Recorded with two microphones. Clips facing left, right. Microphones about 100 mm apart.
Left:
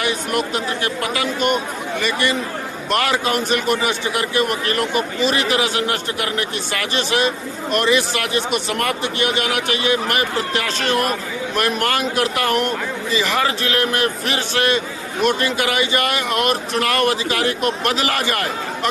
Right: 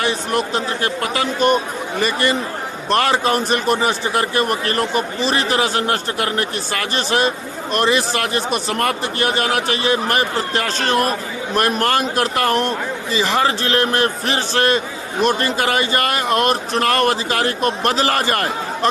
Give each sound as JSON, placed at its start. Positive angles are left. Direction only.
{"t": 0.0, "sound": "a man's voice", "side_deg": -30}